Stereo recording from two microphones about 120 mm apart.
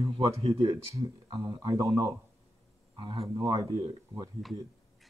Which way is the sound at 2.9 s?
40° right (ahead or behind).